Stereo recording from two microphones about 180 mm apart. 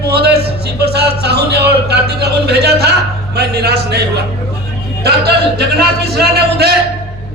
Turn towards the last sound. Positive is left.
turn(degrees=-65)  # may be behind; listen again after turning